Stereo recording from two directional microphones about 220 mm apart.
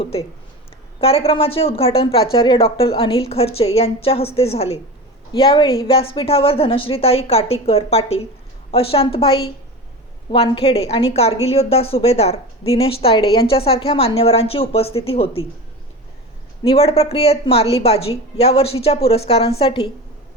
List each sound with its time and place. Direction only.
0.0 s a woman's voice: 25° left (ahead or behind)
16.6 s a woman's voice: 25° left (ahead or behind)